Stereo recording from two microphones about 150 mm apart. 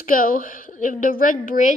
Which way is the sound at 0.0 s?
70° left (ahead or behind).